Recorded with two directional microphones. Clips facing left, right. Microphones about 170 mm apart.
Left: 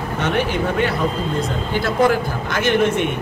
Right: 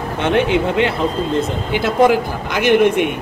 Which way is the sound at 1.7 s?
15° right (ahead or behind).